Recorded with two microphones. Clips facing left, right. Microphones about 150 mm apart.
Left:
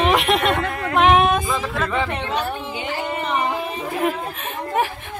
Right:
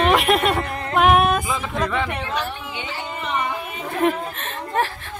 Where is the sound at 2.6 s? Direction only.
35° left (ahead or behind).